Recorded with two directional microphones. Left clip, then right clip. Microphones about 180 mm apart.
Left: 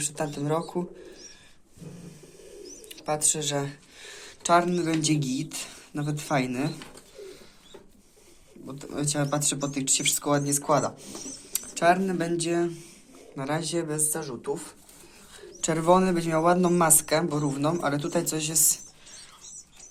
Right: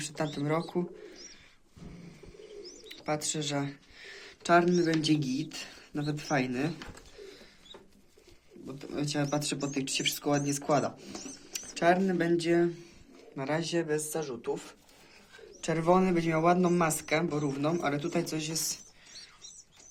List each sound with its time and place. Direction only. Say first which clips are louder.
0.0 s speech: left 3 dB; 20° right (ahead or behind)
2.6 s speech: left 4 dB; 20° right (ahead or behind)
8.6 s speech: left 4 dB; 15° right (ahead or behind)
15.6 s speech: left 5 dB; 10° right (ahead or behind)